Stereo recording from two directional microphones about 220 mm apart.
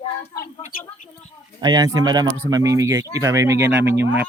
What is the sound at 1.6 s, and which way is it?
Speech, 20° right (ahead or behind).